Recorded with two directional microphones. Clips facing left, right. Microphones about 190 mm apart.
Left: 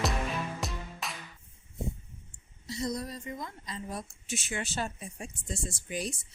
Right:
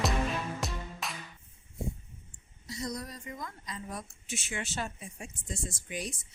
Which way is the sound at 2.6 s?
25° left (ahead or behind).